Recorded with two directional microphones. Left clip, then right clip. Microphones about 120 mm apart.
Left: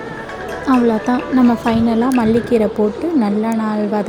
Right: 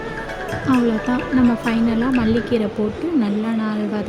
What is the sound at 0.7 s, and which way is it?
Speech, centre (ahead or behind).